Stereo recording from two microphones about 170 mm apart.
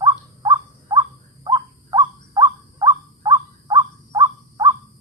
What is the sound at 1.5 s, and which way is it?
Bird, 25° right (ahead or behind).